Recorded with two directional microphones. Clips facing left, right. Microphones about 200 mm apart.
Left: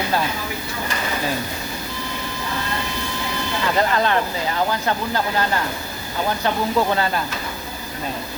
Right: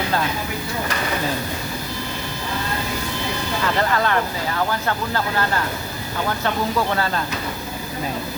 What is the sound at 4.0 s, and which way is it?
Speech, 20° left (ahead or behind).